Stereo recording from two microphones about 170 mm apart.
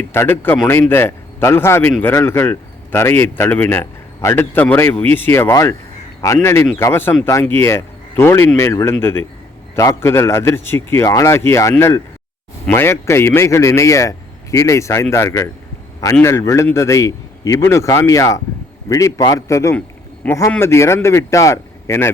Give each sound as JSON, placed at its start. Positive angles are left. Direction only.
{"t": 0.0, "sound": "speech", "side_deg": 15}